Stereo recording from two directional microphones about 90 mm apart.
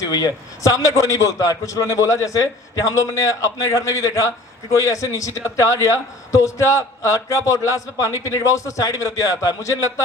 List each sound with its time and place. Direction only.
0.0 s a man's voice: 50° left (ahead or behind)